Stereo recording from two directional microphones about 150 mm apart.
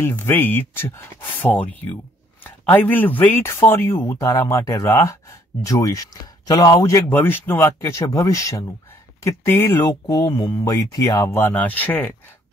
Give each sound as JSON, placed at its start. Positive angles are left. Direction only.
{"t": 0.0, "sound": "speech", "side_deg": 15}